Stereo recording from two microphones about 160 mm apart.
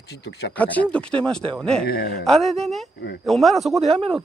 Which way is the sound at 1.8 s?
75° left (ahead or behind).